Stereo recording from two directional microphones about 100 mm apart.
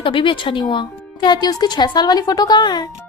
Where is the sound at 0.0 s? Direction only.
60° left (ahead or behind).